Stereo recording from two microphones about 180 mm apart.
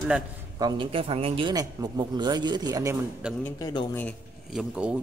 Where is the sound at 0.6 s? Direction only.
25° right (ahead or behind).